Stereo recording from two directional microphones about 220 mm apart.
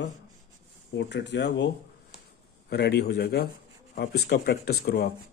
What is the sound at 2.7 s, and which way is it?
Speech, 50° left (ahead or behind).